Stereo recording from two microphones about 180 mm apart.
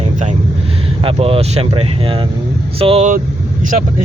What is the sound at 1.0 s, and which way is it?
Speech, 35° right (ahead or behind).